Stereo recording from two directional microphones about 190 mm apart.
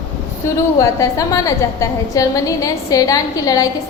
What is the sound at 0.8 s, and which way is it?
A woman's voice, 15° left (ahead or behind).